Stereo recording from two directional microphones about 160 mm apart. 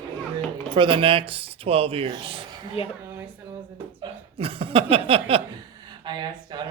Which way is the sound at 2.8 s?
35° left (ahead or behind).